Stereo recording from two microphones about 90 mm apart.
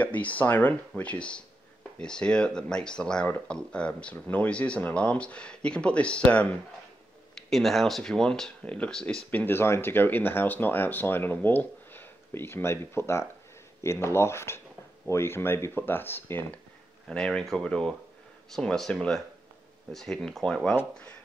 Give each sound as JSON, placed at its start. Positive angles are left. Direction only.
{"t": 0.0, "sound": "speech", "side_deg": 15}
{"t": 7.3, "sound": "speech", "side_deg": 5}
{"t": 17.1, "sound": "speech", "side_deg": 10}